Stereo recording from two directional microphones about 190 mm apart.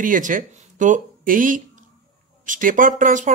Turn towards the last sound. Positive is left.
turn(degrees=-40)  # may be behind; listen again after turning